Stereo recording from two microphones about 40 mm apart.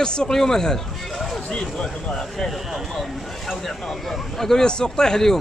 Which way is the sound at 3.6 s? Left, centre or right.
Centre.